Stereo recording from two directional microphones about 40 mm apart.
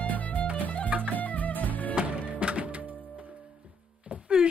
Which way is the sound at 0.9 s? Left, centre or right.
Right.